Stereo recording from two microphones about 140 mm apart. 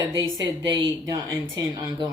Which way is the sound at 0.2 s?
25° right (ahead or behind).